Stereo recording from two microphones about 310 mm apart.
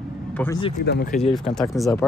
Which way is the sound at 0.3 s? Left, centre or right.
Centre.